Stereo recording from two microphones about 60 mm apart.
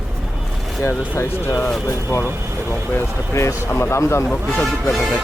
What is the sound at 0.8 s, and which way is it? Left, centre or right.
Speech, left.